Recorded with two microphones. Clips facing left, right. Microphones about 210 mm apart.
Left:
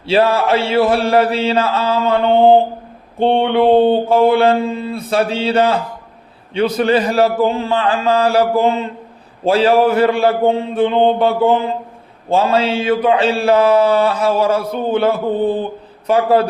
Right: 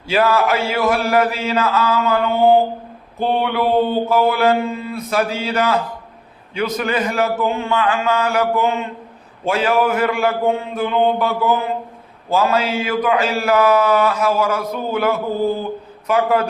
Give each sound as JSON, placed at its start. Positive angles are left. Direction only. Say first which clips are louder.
{"t": 0.1, "sound": "a man's voice", "louder": "left 3 dB", "side_deg": 30}